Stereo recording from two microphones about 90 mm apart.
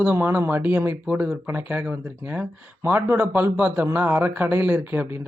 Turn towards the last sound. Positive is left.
turn(degrees=-25)  # may be behind; listen again after turning